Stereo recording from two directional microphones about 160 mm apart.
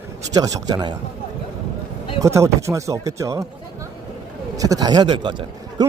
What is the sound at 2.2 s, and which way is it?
A man's voice, 20° right (ahead or behind).